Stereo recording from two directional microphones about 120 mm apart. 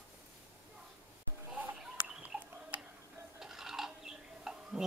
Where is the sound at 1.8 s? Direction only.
5° right (ahead or behind).